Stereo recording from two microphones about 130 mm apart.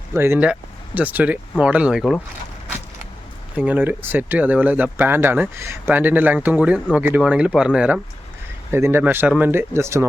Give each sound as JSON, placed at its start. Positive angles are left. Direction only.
{"t": 0.1, "sound": "speech", "side_deg": -20}
{"t": 3.6, "sound": "speech", "side_deg": -15}
{"t": 8.7, "sound": "speech", "side_deg": -15}